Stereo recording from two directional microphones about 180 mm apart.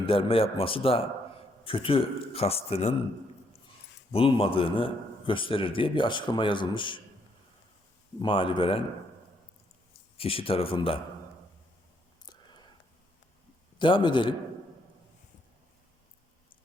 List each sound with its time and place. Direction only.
0.0 s a man's voice: 30° left (ahead or behind)
4.1 s a man's voice: 30° left (ahead or behind)
8.2 s a man's voice: 30° left (ahead or behind)
10.2 s a man's voice: 30° left (ahead or behind)
12.2 s whispering: 25° left (ahead or behind)
13.7 s a man's voice: 25° left (ahead or behind)